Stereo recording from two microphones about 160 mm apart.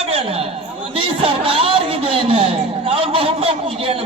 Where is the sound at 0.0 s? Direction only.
35° right (ahead or behind).